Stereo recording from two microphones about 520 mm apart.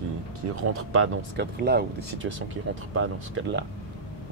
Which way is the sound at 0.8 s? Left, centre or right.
Right.